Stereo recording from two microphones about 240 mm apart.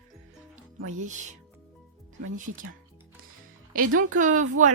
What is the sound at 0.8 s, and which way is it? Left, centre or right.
Speech, right.